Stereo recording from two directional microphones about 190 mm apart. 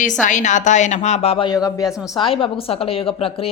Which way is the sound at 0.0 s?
40° left (ahead or behind).